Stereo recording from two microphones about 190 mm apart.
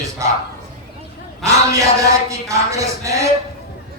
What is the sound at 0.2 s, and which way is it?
Speech, 15° right (ahead or behind).